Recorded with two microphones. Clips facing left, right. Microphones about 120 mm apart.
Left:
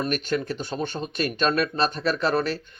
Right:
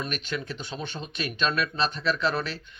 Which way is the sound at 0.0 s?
45° left (ahead or behind).